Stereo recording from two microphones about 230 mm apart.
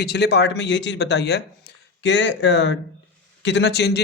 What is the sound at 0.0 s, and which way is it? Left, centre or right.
A man's voice, left.